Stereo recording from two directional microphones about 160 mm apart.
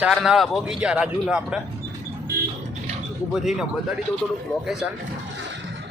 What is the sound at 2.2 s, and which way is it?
Music, 85° right.